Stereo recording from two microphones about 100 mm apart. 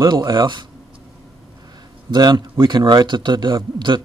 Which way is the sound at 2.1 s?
45° right (ahead or behind).